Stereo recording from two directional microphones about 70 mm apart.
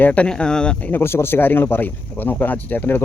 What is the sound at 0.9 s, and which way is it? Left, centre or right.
Speech, left.